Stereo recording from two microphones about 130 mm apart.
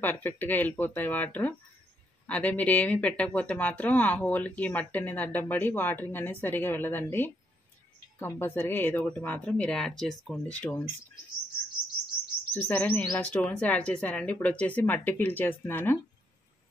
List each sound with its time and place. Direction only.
0.0 s speech: 15° left (ahead or behind)
12.5 s speech: 15° left (ahead or behind)